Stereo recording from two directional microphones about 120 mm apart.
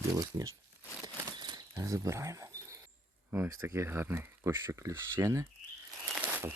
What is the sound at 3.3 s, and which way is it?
Speech, 20° right (ahead or behind).